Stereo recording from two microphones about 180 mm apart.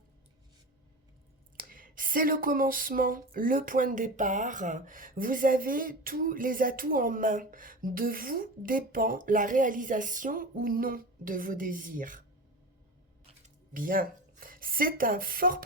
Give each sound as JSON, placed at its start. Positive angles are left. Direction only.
{"t": 1.6, "sound": "speech", "side_deg": -50}
{"t": 13.7, "sound": "speech", "side_deg": -50}